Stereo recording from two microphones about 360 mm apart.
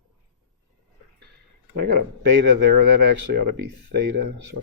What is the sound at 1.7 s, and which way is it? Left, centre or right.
Speech, right.